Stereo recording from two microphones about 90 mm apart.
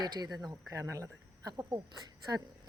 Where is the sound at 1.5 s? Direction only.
45° right (ahead or behind).